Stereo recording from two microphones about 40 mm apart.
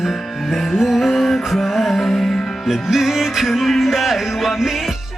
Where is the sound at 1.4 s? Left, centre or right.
Centre.